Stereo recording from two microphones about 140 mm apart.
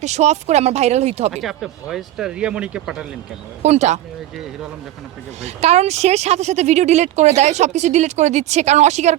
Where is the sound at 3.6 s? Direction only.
55° right (ahead or behind).